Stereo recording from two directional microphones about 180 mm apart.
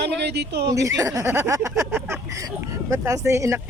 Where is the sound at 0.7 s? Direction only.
15° right (ahead or behind).